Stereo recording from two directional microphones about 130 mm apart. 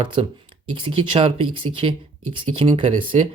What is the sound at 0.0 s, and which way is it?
Speech, 45° right (ahead or behind).